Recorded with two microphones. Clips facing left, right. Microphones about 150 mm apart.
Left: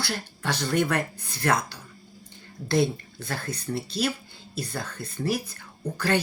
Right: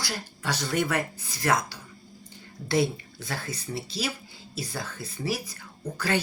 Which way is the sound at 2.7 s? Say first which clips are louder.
Left 1 dB; centre (ahead or behind).